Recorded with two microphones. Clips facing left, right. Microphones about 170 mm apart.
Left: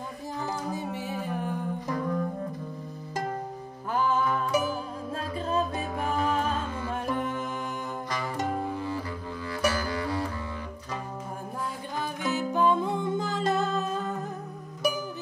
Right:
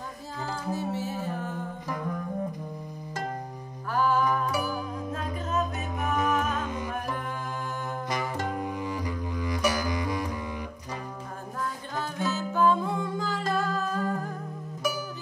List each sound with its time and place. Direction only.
0.7 s music: 15° left (ahead or behind)
3.9 s music: 20° left (ahead or behind)
6.6 s music: 15° right (ahead or behind)
6.9 s music: 25° left (ahead or behind)
8.1 s music: 15° right (ahead or behind)
12.0 s music: 15° left (ahead or behind)